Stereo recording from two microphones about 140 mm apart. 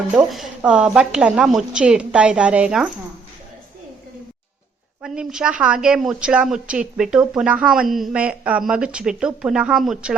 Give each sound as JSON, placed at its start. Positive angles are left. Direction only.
{"t": 0.3, "sound": "a woman's voice", "side_deg": 0}
{"t": 5.0, "sound": "a woman's voice", "side_deg": -5}